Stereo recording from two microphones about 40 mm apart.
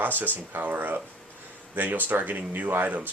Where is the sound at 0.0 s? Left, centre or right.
Right.